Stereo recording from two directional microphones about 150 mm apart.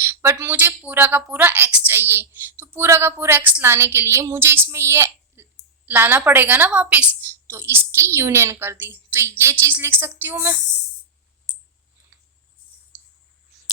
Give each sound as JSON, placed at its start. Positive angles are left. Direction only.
{"t": 0.0, "sound": "a woman's voice", "side_deg": -15}